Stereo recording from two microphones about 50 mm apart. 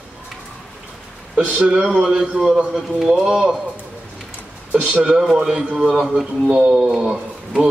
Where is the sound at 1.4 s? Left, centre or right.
Right.